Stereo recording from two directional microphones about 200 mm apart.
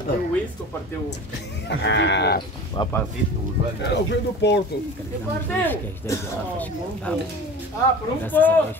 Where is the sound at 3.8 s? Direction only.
60° left (ahead or behind).